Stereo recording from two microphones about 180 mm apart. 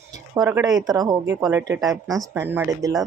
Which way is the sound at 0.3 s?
15° right (ahead or behind).